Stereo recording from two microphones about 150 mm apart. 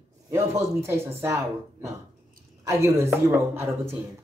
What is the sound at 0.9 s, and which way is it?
A woman's voice, 20° right (ahead or behind).